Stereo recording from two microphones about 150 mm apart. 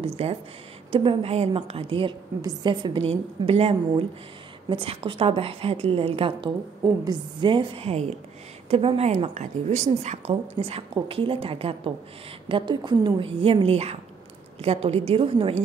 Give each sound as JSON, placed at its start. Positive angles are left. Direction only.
{"t": 0.0, "sound": "a woman's voice", "side_deg": -40}